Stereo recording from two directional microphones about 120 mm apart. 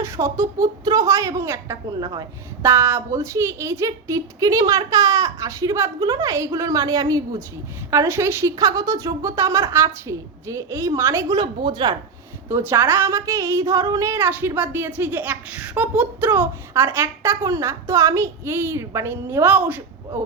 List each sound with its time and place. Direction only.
0.0 s a woman's voice: 25° right (ahead or behind)
1.9 s a woman's voice: 35° right (ahead or behind)
2.6 s a woman's voice: 20° right (ahead or behind)
11.3 s speech: 40° right (ahead or behind)
12.5 s a woman's voice: 20° right (ahead or behind)